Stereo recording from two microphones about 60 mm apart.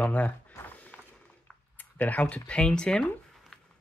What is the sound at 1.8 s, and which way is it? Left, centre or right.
Speech, left.